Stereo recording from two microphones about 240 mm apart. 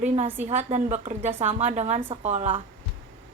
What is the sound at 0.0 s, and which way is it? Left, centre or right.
A woman's voice, right.